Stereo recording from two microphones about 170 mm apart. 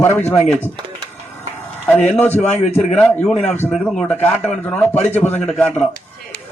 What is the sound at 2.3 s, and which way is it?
Speech, 40° left (ahead or behind).